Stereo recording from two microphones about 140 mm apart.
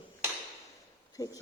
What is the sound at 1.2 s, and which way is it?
Speech, 25° left (ahead or behind).